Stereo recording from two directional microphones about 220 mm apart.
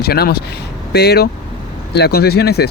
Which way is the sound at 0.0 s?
45° left (ahead or behind).